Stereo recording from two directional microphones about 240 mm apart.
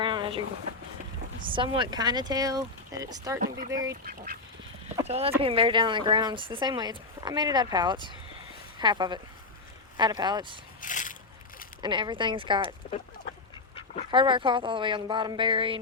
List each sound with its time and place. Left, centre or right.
0.0 s a sound: centre
1.5 s speech: right
5.0 s speech: right
10.8 s a sound: left
11.8 s speech: centre
14.1 s speech: centre